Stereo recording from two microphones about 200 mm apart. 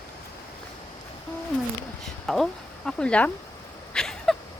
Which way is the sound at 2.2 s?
Centre (ahead or behind).